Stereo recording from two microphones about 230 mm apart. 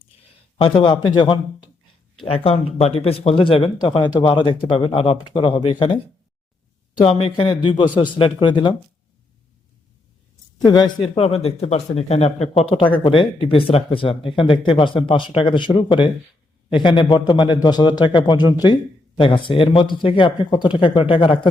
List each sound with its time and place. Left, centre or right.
0.6 s speech: left
7.0 s speech: left
10.7 s speech: centre